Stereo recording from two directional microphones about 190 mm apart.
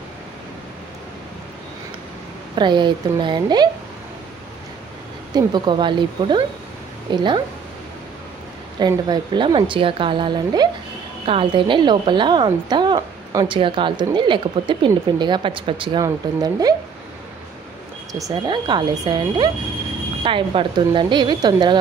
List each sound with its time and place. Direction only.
2.5 s a woman's voice: 25° right (ahead or behind)
5.3 s a woman's voice: 25° right (ahead or behind)
8.7 s a woman's voice: 20° right (ahead or behind)
18.1 s a woman's voice: 20° right (ahead or behind)